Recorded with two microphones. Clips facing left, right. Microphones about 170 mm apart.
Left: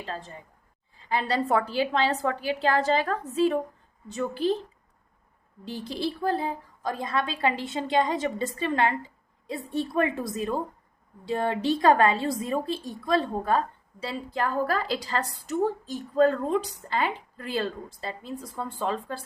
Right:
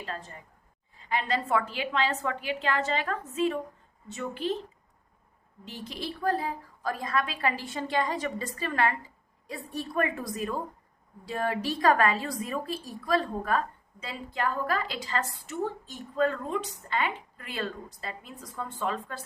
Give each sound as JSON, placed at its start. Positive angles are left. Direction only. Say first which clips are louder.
{"t": 0.9, "sound": "a woman's voice", "louder": "left 3 dB", "side_deg": 35}
{"t": 5.6, "sound": "a woman's voice", "louder": "left 7 dB", "side_deg": 35}